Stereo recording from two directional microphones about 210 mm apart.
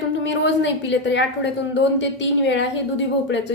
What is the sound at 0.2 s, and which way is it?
A woman's voice, 60° left (ahead or behind).